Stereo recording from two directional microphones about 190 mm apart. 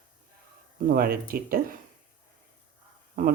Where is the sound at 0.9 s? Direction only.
50° right (ahead or behind).